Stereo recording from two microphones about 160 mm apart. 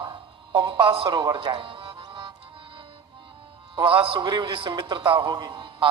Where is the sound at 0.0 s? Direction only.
30° right (ahead or behind).